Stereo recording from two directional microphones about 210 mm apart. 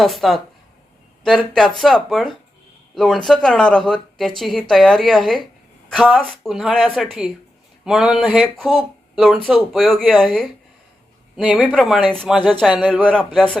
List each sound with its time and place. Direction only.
0.0 s speech: centre (ahead or behind)